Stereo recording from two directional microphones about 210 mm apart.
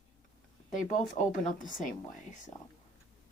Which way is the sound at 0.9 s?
35° left (ahead or behind).